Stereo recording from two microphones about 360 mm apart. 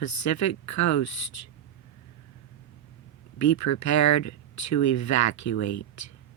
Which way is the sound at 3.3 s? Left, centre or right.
Left.